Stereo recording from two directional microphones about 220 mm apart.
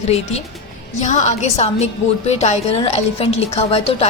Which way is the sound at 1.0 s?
35° left (ahead or behind).